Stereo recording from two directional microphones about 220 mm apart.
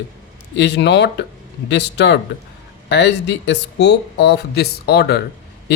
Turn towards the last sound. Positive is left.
turn(degrees=45)  # may be behind; listen again after turning